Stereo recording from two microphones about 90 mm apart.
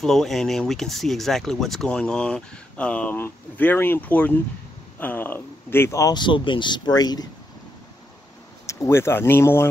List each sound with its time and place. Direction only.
0.0 s speech: 5° left (ahead or behind); by 6.1 s 35° left (ahead or behind)
6.1 s speech: 65° left (ahead or behind); by 7.2 s 45° left (ahead or behind)
8.6 s speech: 30° left (ahead or behind)